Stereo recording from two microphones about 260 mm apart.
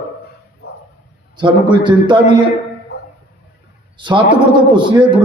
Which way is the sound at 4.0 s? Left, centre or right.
Centre.